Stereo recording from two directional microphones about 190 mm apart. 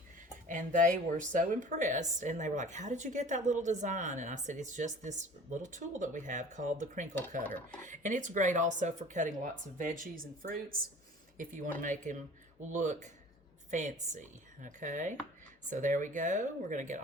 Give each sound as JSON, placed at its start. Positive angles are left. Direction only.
{"t": 0.4, "sound": "a woman's voice", "side_deg": -45}